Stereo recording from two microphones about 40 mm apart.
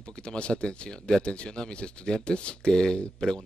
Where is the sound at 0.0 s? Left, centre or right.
Left.